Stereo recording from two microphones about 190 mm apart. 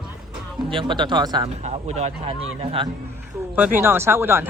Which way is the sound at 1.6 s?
35° right (ahead or behind).